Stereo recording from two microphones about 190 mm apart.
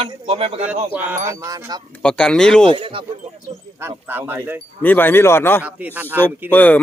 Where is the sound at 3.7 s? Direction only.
10° right (ahead or behind).